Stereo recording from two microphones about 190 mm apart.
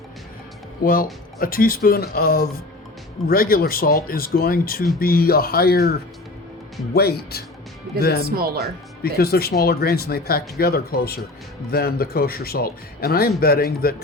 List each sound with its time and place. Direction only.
0.8 s speech: 50° left (ahead or behind)